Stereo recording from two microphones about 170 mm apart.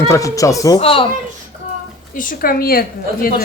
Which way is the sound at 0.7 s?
35° left (ahead or behind).